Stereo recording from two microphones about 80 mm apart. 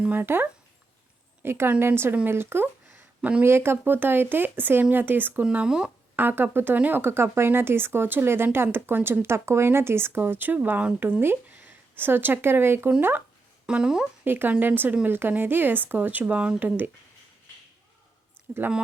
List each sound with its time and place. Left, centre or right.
0.2 s a woman's voice: right
3.2 s speech: centre
3.4 s speech: right; by 5.9 s centre
6.1 s speech: right
13.7 s speech: centre
14.3 s speech: right
18.5 s speech: centre